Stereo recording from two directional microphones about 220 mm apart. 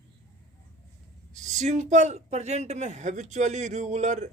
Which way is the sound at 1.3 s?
35° right (ahead or behind).